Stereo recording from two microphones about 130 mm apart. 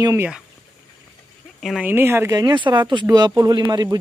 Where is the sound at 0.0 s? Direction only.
20° right (ahead or behind).